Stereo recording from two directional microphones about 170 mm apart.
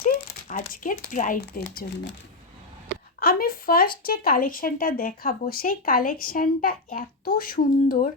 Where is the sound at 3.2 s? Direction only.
60° left (ahead or behind).